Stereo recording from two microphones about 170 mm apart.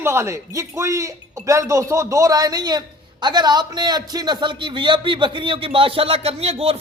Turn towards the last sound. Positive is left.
turn(degrees=-35)  # may be behind; listen again after turning